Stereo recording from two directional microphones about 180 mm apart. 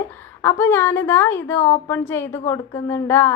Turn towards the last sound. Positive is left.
turn(degrees=15)  # may be behind; listen again after turning